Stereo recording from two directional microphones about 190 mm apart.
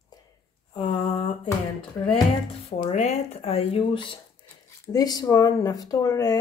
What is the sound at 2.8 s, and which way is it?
Speech, 35° left (ahead or behind).